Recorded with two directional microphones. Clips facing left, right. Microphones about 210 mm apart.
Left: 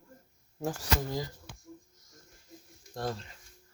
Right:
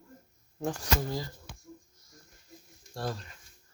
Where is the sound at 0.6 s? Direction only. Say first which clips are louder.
Right 1 dB; 10° left (ahead or behind).